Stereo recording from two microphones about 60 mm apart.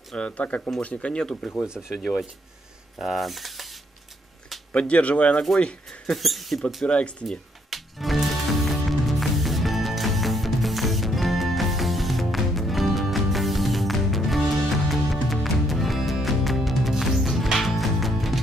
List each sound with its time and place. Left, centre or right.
0.1 s speech: left
1.7 s speech: centre
2.0 s speech: centre
4.7 s speech: left
6.0 s speech: centre
6.9 s speech: centre
7.2 s music: centre